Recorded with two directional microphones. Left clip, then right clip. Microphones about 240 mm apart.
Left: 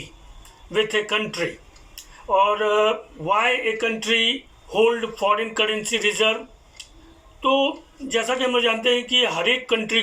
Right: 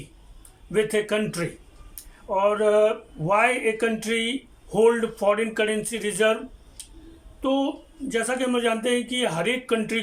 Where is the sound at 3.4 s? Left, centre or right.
Right.